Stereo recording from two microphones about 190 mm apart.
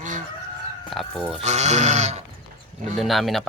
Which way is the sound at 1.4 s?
35° right (ahead or behind).